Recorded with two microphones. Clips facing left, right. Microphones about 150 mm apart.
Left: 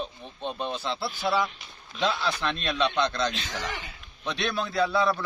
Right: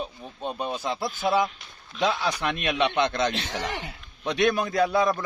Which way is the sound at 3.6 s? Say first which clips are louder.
Right 3 dB; 65° right (ahead or behind).